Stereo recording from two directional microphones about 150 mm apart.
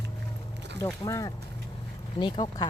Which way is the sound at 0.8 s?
20° left (ahead or behind).